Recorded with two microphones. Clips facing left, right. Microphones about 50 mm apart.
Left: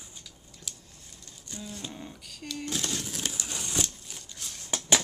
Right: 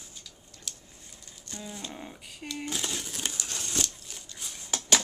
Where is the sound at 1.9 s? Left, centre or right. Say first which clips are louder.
Right 1 dB; centre.